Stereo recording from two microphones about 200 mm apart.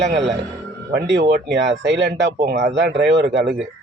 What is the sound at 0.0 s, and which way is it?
Speech, 60° right (ahead or behind).